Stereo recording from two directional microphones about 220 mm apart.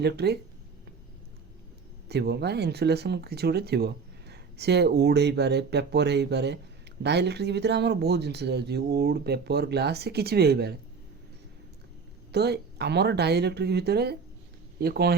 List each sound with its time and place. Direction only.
0.0 s speech: 50° right (ahead or behind)
2.0 s speech: 50° right (ahead or behind)
12.3 s speech: 50° right (ahead or behind)